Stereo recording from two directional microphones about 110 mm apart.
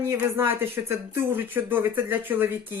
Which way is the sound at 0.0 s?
20° right (ahead or behind).